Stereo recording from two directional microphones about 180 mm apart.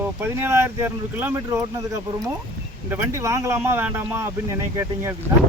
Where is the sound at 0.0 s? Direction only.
10° right (ahead or behind).